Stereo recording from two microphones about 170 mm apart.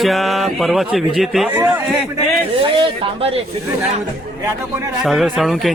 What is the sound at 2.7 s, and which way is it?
Speech, 35° right (ahead or behind).